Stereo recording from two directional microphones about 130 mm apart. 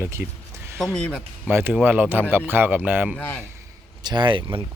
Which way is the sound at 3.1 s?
10° left (ahead or behind).